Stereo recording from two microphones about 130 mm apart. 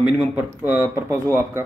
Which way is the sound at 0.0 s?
10° right (ahead or behind).